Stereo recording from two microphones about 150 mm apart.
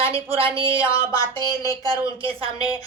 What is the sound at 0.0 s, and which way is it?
A woman's voice, 40° right (ahead or behind).